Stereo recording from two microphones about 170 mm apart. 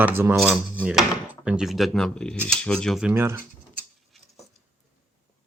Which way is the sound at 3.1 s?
15° right (ahead or behind).